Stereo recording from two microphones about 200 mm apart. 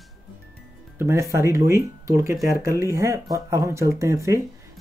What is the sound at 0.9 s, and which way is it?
Speech, 15° right (ahead or behind).